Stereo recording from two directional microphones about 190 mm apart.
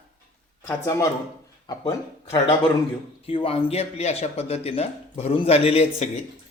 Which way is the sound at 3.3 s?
30° left (ahead or behind).